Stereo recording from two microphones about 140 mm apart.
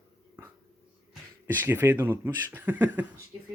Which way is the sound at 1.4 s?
15° right (ahead or behind).